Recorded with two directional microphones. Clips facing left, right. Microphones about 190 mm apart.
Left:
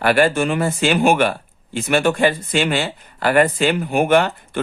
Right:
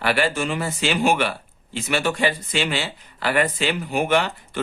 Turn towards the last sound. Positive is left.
turn(degrees=50)  # may be behind; listen again after turning